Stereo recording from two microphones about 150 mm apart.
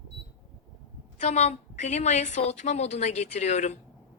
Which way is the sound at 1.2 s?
50° left (ahead or behind).